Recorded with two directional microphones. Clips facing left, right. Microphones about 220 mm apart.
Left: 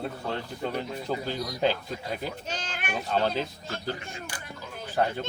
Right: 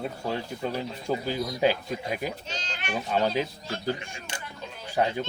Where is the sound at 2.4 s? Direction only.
50° left (ahead or behind).